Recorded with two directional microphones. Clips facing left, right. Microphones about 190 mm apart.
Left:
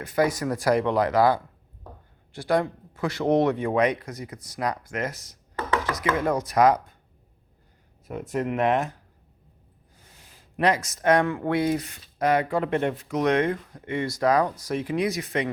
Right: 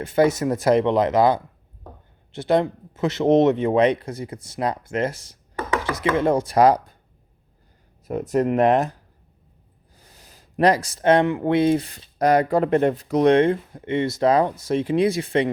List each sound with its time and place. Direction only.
0.0 s speech: 25° right (ahead or behind)
8.0 s speech: 40° right (ahead or behind)
10.0 s speech: 40° right (ahead or behind)